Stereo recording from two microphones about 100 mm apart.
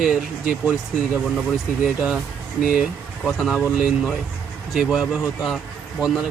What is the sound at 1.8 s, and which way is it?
Speech, 5° right (ahead or behind).